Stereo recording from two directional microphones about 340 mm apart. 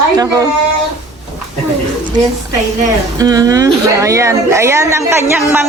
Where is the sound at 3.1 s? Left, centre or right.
Centre.